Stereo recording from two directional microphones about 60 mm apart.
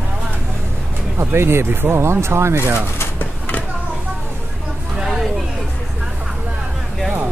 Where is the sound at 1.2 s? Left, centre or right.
Right.